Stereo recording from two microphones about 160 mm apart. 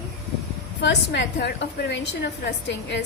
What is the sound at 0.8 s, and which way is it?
A woman's voice, 90° left.